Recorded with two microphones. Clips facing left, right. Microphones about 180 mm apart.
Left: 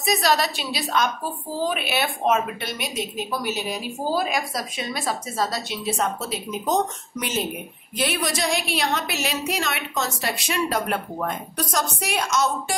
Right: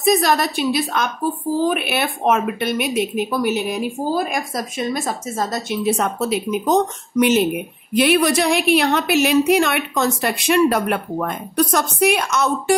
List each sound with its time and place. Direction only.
0.0 s a woman's voice: 50° right (ahead or behind)